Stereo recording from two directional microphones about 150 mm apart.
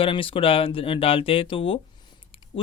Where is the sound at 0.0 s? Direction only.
35° left (ahead or behind).